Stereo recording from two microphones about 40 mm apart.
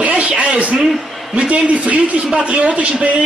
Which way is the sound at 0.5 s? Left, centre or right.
Right.